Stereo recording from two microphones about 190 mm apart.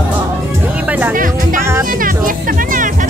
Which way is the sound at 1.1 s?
45° right (ahead or behind).